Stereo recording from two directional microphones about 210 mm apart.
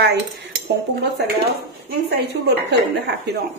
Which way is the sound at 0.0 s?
50° right (ahead or behind).